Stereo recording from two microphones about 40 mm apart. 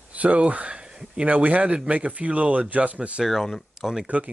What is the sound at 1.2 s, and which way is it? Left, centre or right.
Speech, right.